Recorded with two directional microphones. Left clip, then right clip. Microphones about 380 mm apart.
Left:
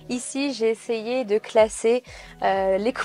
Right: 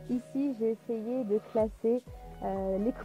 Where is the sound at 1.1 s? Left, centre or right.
Centre.